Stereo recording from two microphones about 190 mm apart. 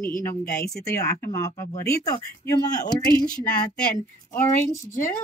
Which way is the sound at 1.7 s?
55° left (ahead or behind).